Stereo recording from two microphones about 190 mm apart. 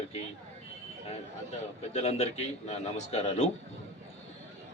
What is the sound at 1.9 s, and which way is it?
A man's voice, 35° left (ahead or behind).